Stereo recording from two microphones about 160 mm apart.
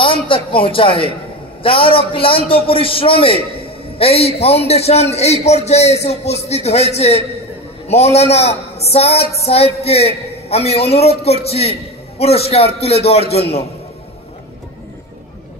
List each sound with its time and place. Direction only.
0.0 s a man's voice: 35° left (ahead or behind)